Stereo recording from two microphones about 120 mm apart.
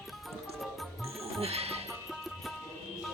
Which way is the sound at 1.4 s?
55° right (ahead or behind).